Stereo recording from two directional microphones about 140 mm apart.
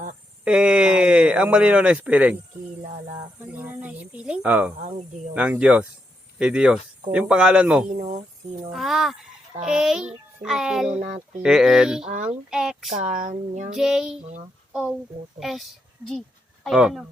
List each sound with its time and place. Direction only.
0.4 s speech: 5° right (ahead or behind)
3.4 s a sound: 15° right (ahead or behind)
4.8 s speech: 55° right (ahead or behind)
5.3 s speech: 10° right (ahead or behind)
7.9 s speech: 60° right (ahead or behind)
8.7 s a child's voice: centre (ahead or behind)
12.0 s speech: 60° right (ahead or behind)
12.5 s speech: 5° right (ahead or behind)
12.9 s speech: 65° right (ahead or behind)
13.7 s speech: 5° right (ahead or behind)
14.2 s speech: 55° right (ahead or behind)
14.7 s speech: 10° right (ahead or behind)
16.6 s speech: centre (ahead or behind)